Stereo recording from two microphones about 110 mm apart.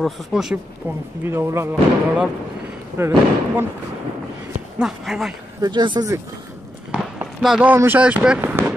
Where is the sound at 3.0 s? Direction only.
20° right (ahead or behind).